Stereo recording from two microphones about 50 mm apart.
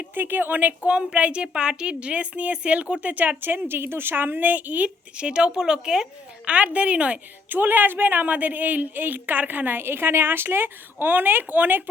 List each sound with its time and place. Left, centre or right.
0.0 s speech: right
0.8 s a woman's voice: right
6.4 s a woman's voice: right
7.5 s a woman's voice: right